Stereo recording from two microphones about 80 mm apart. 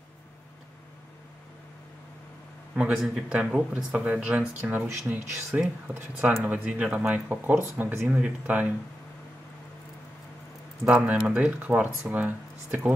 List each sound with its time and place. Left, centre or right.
2.7 s speech: centre
10.9 s speech: centre